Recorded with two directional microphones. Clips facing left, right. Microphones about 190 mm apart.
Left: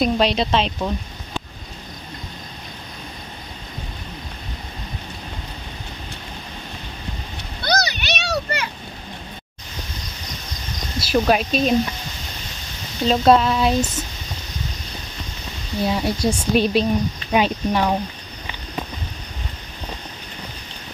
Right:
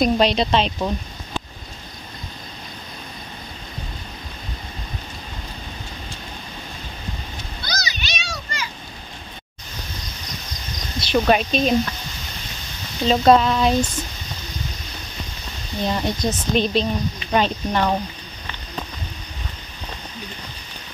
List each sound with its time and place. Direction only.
0.0 s frying: 5° left (ahead or behind)
7.6 s a sound: 60° left (ahead or behind)
11.0 s speech: 5° left (ahead or behind)
13.0 s frying: centre (ahead or behind)
15.8 s speech: 5° left (ahead or behind)